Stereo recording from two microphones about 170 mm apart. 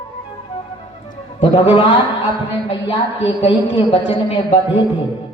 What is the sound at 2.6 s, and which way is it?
A woman's voice, 30° left (ahead or behind).